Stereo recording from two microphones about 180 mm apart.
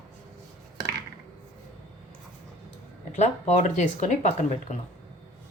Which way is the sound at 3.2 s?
40° left (ahead or behind).